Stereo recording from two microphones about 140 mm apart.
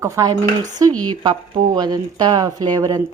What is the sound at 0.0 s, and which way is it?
Speech, 25° right (ahead or behind).